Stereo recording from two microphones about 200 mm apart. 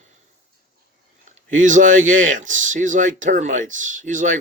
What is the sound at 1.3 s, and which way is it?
Speech, 40° right (ahead or behind).